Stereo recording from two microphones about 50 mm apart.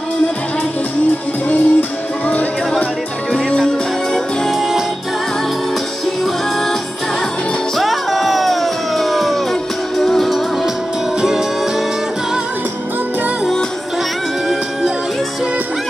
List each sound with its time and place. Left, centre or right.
1.5 s music: left
3.3 s music: centre
4.5 s music: centre
7.7 s music: centre
11.1 s music: centre